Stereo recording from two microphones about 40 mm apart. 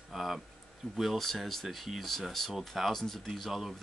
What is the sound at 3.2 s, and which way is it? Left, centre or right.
Speech, centre.